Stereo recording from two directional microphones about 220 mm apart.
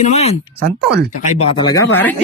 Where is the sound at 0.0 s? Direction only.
30° left (ahead or behind).